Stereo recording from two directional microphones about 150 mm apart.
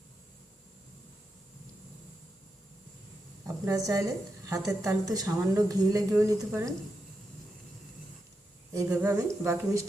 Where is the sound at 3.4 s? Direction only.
20° right (ahead or behind).